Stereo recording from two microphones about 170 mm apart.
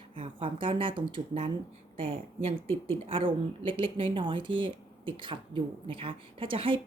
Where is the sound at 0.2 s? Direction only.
30° right (ahead or behind).